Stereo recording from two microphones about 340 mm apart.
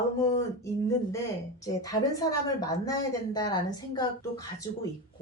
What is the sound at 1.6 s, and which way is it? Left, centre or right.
A woman's voice, centre.